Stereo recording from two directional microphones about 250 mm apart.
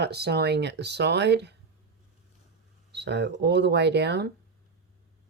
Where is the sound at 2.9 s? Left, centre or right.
Right.